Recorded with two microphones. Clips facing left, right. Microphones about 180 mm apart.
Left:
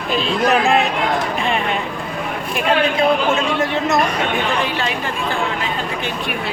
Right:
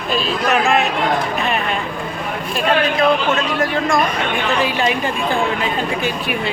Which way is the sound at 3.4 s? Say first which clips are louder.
Even; 25° left (ahead or behind).